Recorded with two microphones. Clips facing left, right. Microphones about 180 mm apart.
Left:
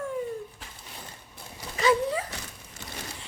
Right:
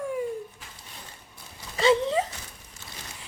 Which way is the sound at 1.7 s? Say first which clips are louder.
Right 2 dB; 25° right (ahead or behind).